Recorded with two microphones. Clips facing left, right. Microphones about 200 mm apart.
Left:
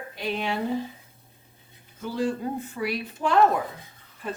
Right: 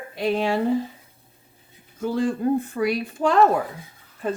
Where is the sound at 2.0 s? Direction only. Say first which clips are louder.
Right 4 dB; 50° right (ahead or behind).